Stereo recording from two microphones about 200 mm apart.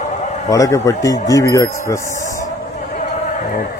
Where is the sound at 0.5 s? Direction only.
15° left (ahead or behind).